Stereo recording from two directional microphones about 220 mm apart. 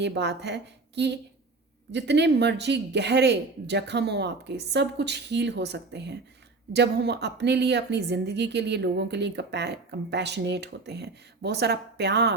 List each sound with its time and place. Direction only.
0.0 s a woman's voice: 50° right (ahead or behind)